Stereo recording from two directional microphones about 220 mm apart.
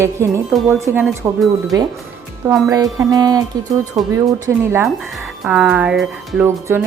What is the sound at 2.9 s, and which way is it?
Speech, 15° right (ahead or behind).